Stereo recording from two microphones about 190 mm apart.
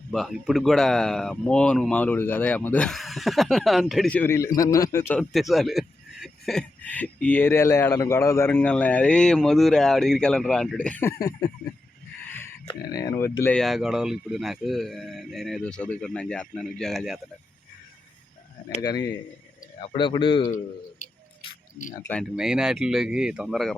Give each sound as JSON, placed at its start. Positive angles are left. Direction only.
{"t": 0.1, "sound": "speech", "side_deg": 0}
{"t": 5.3, "sound": "speech", "side_deg": 0}
{"t": 11.2, "sound": "speech", "side_deg": 20}
{"t": 12.6, "sound": "speech", "side_deg": 20}
{"t": 13.6, "sound": "speech", "side_deg": 0}
{"t": 18.8, "sound": "speech", "side_deg": 20}
{"t": 22.0, "sound": "speech", "side_deg": 5}